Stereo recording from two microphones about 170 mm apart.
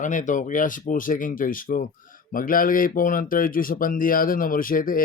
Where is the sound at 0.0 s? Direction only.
50° left (ahead or behind).